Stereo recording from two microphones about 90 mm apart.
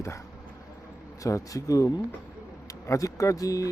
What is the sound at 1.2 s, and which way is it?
Speech, 40° left (ahead or behind).